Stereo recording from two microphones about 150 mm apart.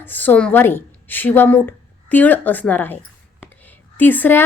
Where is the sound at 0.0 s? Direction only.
10° left (ahead or behind).